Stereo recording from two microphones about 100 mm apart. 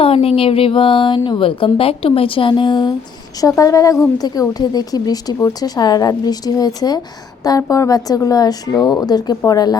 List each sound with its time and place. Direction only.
0.0 s speech: 75° left (ahead or behind); by 2.9 s 50° left (ahead or behind)
3.4 s speech: 35° left (ahead or behind)